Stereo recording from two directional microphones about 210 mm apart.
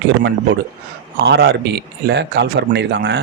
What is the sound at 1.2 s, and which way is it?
Speech, 50° right (ahead or behind).